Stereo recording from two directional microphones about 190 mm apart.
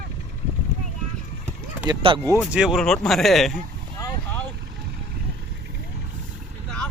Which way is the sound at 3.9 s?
15° left (ahead or behind).